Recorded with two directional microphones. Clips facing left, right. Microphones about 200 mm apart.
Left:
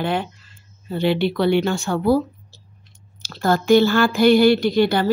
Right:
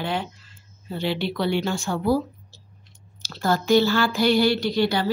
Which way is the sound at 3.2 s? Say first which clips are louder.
Left 4 dB; 55° left (ahead or behind).